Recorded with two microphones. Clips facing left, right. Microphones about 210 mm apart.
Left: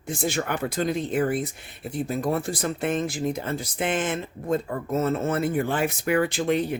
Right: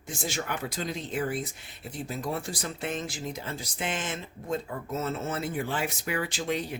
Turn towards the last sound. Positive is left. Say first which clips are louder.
# left 7 dB
turn(degrees=55)  # may be behind; listen again after turning